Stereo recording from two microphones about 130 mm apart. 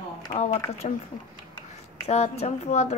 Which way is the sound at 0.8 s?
55° left (ahead or behind).